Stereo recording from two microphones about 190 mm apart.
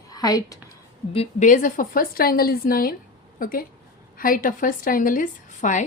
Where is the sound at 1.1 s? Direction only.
35° left (ahead or behind).